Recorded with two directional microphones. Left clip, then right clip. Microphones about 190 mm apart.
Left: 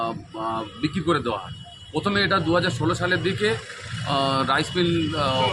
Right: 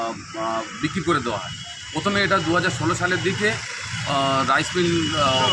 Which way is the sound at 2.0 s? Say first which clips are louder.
Right 2 dB; 30° left (ahead or behind).